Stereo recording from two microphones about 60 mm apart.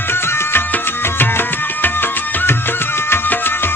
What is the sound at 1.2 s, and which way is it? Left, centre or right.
Music, left.